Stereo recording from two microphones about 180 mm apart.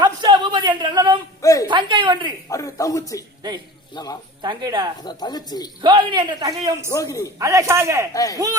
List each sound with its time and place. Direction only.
0.0 s a sound: 25° right (ahead or behind)
1.4 s a woman's voice: 20° left (ahead or behind)
1.6 s speech: 25° right (ahead or behind)
2.5 s a man's voice: 20° left (ahead or behind)
4.4 s speech: 25° right (ahead or behind)
5.0 s speech: 25° left (ahead or behind)
5.8 s speech: 25° right (ahead or behind)
6.8 s a man's voice: 20° left (ahead or behind)
7.3 s speech: 20° right (ahead or behind)
8.1 s speech: 20° left (ahead or behind)